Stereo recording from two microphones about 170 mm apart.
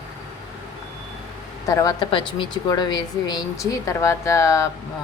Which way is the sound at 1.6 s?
20° left (ahead or behind).